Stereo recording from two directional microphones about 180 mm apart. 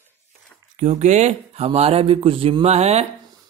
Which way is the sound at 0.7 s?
40° right (ahead or behind).